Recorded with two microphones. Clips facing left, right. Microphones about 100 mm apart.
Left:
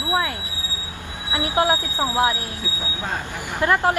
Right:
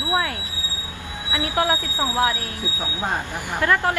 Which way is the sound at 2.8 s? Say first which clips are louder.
Right 3 dB; 20° right (ahead or behind).